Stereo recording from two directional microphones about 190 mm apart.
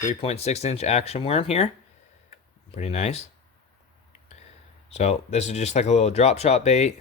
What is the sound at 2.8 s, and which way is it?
Speech, 35° left (ahead or behind).